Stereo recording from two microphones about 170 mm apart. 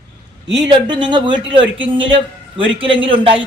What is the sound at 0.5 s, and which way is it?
A man's voice, 30° right (ahead or behind).